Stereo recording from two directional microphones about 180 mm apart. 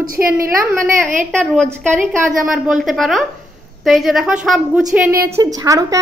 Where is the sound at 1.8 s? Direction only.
15° right (ahead or behind).